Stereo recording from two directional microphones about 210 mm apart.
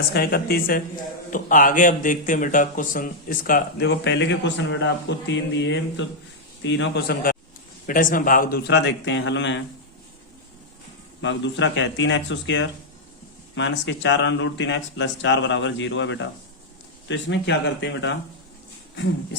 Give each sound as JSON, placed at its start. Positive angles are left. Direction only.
{"t": 0.1, "sound": "a man's voice", "side_deg": 50}
{"t": 11.2, "sound": "speech", "side_deg": 60}